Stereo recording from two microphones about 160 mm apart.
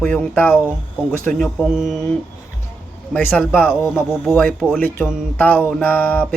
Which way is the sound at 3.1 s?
10° left (ahead or behind).